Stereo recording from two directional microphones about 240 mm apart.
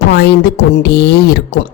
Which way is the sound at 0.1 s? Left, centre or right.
Left.